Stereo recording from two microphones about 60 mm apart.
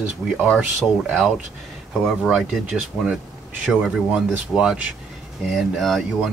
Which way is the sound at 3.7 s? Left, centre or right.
Centre.